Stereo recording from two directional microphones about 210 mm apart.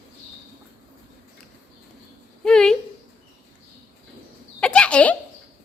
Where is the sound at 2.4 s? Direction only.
5° left (ahead or behind).